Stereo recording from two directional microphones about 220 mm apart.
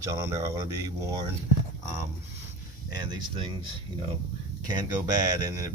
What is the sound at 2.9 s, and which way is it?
Speech, 20° right (ahead or behind).